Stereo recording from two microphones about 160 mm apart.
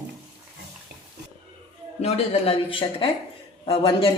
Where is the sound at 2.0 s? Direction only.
40° left (ahead or behind).